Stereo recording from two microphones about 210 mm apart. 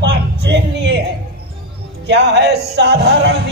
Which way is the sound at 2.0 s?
55° right (ahead or behind).